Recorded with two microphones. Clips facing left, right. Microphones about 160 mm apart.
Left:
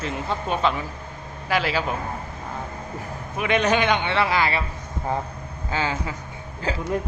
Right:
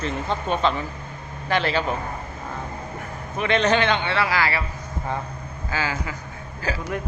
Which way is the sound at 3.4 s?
10° left (ahead or behind).